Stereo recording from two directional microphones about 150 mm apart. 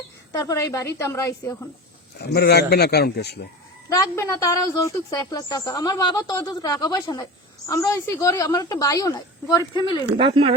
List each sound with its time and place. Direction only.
0.3 s a woman's voice: 20° left (ahead or behind)
2.1 s a man's voice: 90° left
3.8 s a woman's voice: 20° left (ahead or behind)
10.2 s speech: 35° right (ahead or behind)